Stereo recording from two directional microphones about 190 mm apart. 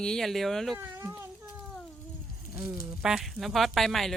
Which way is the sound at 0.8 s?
10° right (ahead or behind).